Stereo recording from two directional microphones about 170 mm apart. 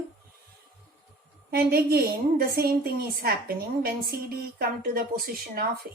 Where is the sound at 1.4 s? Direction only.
65° right (ahead or behind).